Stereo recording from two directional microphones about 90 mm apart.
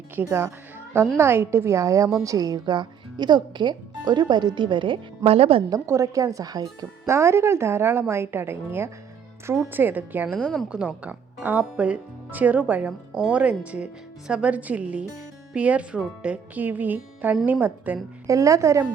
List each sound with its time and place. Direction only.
0.2 s a woman's voice: 25° right (ahead or behind); by 5.6 s 90° right
5.7 s speech: 35° right (ahead or behind)
7.1 s a woman's voice: 30° right (ahead or behind)
18.3 s speech: 35° right (ahead or behind)